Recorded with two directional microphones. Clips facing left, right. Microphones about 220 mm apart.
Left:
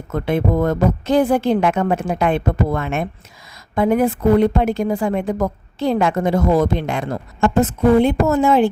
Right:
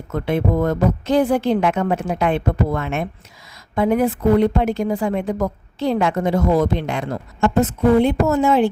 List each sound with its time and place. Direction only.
0.1 s a woman's voice: 50° left (ahead or behind)